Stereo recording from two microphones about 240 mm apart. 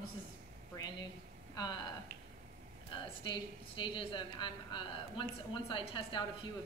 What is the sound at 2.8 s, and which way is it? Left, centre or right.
A woman's voice, left.